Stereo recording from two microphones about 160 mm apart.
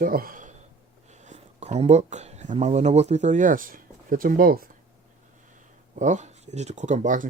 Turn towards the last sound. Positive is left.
turn(degrees=-50)  # may be behind; listen again after turning